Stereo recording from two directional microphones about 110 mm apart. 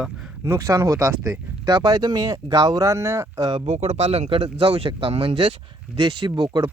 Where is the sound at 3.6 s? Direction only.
85° right; by 6.6 s 45° right (ahead or behind).